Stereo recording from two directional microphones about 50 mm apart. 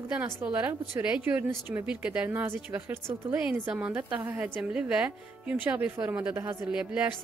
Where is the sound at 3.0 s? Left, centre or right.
Right.